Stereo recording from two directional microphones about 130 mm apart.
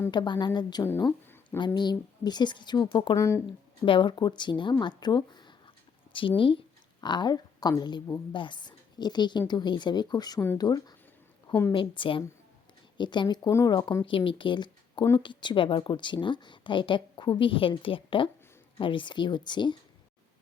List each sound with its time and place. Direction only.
0.1 s a woman's voice: 35° left (ahead or behind)
3.2 s speech: 20° left (ahead or behind)
3.4 s a woman's voice: 40° left (ahead or behind)